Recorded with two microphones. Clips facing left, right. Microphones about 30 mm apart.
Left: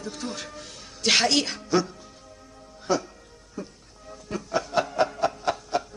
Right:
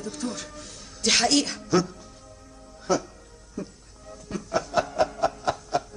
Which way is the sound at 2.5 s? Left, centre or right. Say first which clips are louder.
Even; centre.